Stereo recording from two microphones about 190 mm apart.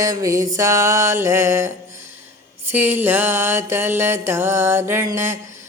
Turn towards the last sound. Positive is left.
turn(degrees=-15)  # may be behind; listen again after turning